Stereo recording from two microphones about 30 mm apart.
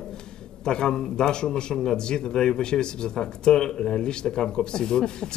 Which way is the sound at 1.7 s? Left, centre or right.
Centre.